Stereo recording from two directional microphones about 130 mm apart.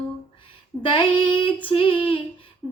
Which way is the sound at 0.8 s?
40° left (ahead or behind).